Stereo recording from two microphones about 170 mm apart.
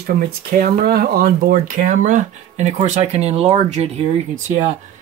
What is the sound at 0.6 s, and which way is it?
Speech, 60° right (ahead or behind).